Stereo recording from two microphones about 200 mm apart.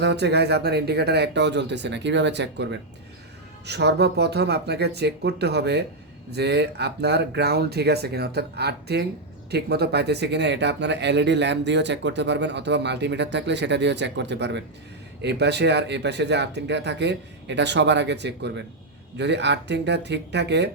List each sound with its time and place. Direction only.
0.0 s speech: 60° right (ahead or behind)